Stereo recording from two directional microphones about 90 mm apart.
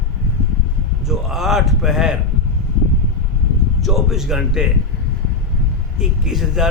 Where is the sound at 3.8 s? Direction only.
5° right (ahead or behind).